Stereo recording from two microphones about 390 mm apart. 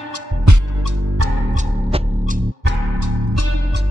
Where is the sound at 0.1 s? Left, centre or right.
Right.